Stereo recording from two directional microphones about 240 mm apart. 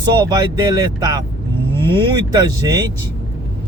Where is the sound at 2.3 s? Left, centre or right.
Centre.